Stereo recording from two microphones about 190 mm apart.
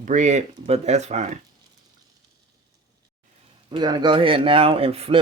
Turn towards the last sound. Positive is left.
turn(degrees=-30)  # may be behind; listen again after turning